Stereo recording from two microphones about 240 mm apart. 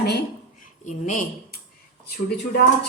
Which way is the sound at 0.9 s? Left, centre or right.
Left.